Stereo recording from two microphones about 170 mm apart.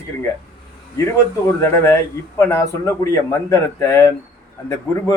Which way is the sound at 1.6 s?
15° left (ahead or behind).